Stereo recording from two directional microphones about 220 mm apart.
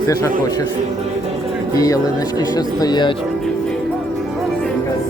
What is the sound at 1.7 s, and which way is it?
Speech, 15° left (ahead or behind).